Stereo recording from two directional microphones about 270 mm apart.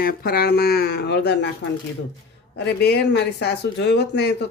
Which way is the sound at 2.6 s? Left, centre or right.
Left.